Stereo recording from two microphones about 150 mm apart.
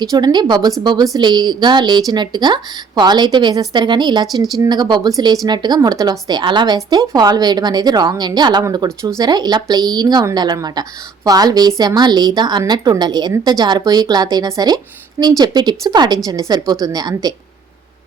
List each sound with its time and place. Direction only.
0.0 s a woman's voice: 30° right (ahead or behind)